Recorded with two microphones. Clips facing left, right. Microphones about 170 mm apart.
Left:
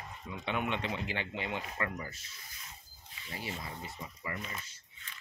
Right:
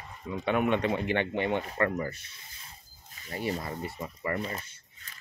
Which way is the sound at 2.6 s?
45° right (ahead or behind).